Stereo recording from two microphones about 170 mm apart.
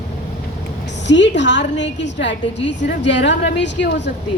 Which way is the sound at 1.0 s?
90° left.